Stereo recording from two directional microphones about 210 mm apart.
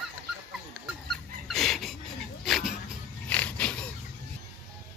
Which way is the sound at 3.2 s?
5° left (ahead or behind).